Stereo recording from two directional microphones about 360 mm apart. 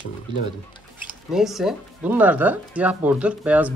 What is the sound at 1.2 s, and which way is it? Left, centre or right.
Speech, centre.